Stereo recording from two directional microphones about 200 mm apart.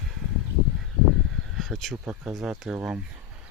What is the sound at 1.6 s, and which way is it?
Speech, centre (ahead or behind).